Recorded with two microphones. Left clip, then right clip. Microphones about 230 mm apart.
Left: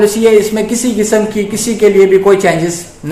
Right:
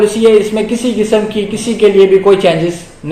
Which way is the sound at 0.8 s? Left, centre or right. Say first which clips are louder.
Even; left.